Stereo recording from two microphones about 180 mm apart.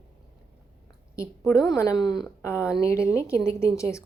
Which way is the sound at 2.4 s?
15° left (ahead or behind).